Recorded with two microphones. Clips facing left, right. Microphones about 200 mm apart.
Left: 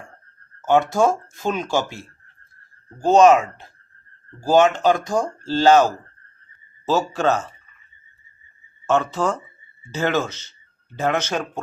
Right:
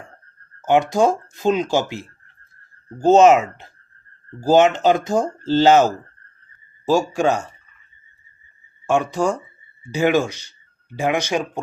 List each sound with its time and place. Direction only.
0.6 s speech: 15° right (ahead or behind)
3.1 s speech: 25° right (ahead or behind)
4.4 s speech: 20° right (ahead or behind)
8.9 s speech: 15° right (ahead or behind)